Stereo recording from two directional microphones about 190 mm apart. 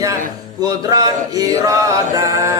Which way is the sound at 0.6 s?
20° right (ahead or behind).